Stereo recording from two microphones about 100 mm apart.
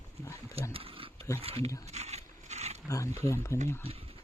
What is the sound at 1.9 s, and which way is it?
Roaring cats, 90° right.